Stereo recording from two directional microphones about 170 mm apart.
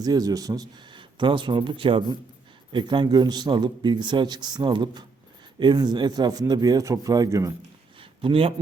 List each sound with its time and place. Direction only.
0.0 s a man's voice: 20° right (ahead or behind)
8.2 s speech: 35° right (ahead or behind)